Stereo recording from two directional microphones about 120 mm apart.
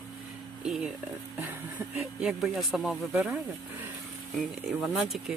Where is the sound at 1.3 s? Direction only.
15° right (ahead or behind).